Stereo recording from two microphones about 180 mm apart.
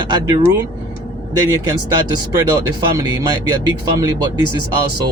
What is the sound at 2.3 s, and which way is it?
Speech, 20° right (ahead or behind).